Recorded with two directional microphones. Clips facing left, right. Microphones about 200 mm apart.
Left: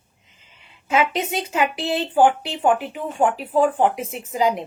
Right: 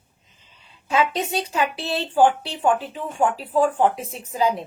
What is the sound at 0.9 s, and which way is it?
A woman's voice, 20° left (ahead or behind).